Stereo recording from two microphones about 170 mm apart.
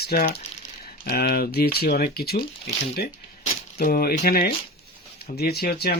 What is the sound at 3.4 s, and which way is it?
Crushing, 55° left (ahead or behind).